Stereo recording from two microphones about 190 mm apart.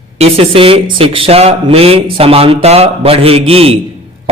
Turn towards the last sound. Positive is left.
turn(degrees=-30)  # may be behind; listen again after turning